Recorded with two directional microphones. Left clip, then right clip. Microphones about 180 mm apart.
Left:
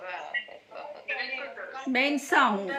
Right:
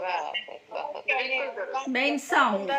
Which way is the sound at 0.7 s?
50° right (ahead or behind).